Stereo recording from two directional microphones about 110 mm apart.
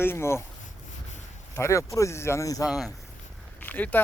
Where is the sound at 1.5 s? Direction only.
25° left (ahead or behind).